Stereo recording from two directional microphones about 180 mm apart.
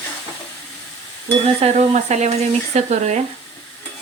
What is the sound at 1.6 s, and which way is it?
Speech, 40° right (ahead or behind).